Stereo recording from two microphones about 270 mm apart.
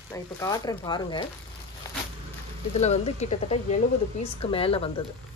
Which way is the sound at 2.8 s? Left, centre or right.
Left.